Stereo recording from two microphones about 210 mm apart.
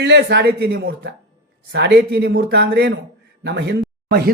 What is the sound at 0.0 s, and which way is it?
Speech, 55° right (ahead or behind).